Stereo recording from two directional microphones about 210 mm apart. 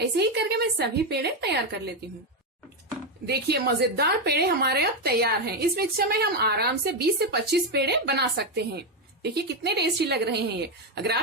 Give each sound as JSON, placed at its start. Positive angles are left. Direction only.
{"t": 0.0, "sound": "a woman's voice", "side_deg": -55}
{"t": 3.2, "sound": "a woman's voice", "side_deg": -50}